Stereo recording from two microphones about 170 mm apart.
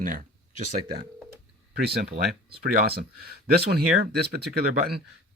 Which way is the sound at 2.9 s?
65° right (ahead or behind).